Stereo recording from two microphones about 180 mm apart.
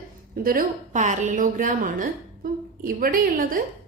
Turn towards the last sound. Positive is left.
turn(degrees=-50)  # may be behind; listen again after turning